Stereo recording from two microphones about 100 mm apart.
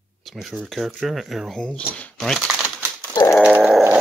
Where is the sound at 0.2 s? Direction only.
Centre (ahead or behind).